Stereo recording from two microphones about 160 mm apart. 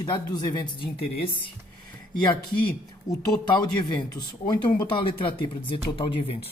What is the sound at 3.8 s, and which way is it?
Speech, 25° left (ahead or behind).